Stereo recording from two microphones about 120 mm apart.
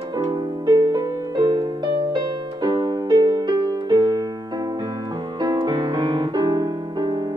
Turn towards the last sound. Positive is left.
turn(degrees=-35)  # may be behind; listen again after turning